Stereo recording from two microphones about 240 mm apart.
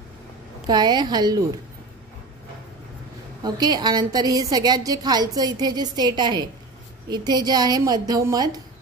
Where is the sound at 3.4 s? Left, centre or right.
Centre.